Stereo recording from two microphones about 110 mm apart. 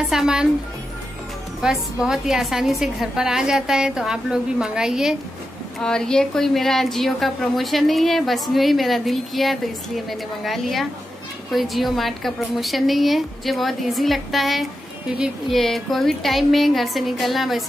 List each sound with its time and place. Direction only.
0.0 s a woman's voice: 5° right (ahead or behind)
1.6 s a woman's voice: 5° right (ahead or behind)
5.8 s a woman's voice: 5° left (ahead or behind)